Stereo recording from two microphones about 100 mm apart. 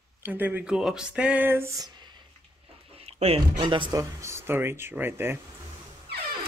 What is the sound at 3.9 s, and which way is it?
Speech, 30° right (ahead or behind).